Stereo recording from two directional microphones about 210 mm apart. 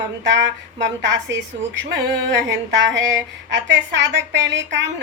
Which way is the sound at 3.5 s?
60° right (ahead or behind).